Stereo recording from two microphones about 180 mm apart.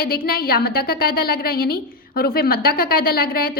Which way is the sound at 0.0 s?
55° left (ahead or behind).